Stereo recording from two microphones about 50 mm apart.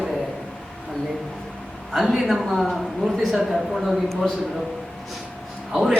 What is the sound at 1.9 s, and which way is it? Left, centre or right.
A man's voice, centre.